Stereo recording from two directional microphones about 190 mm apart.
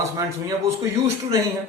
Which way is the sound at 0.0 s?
15° right (ahead or behind).